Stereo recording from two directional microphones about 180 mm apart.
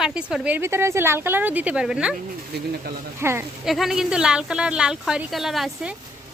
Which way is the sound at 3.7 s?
Centre (ahead or behind).